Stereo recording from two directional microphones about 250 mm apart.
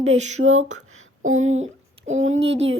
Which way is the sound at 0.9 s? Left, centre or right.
Right.